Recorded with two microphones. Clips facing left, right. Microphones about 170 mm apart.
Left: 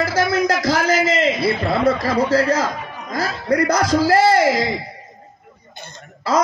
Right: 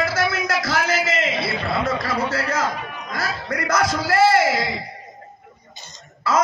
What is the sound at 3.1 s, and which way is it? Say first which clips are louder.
A man's voice: left 7 dB; 30° left (ahead or behind).